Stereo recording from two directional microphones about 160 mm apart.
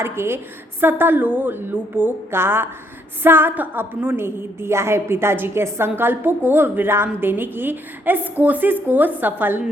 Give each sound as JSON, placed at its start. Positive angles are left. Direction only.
{"t": 0.0, "sound": "a woman's voice", "side_deg": -15}